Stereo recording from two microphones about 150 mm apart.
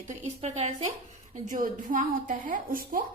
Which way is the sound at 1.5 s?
60° right (ahead or behind).